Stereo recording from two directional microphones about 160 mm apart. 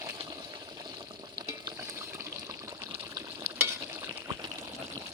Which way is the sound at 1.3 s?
25° right (ahead or behind).